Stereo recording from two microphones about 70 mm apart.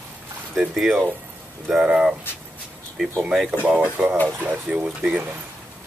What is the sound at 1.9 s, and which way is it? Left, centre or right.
Speech, centre.